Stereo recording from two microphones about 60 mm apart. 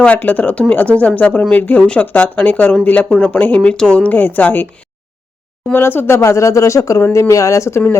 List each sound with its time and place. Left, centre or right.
0.0 s a woman's voice: left
5.7 s speech: left